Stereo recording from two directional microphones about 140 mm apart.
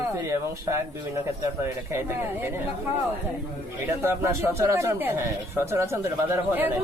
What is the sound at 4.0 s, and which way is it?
Speech, 20° right (ahead or behind).